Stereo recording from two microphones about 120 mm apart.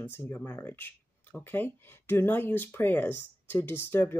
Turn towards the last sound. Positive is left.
turn(degrees=20)  # may be behind; listen again after turning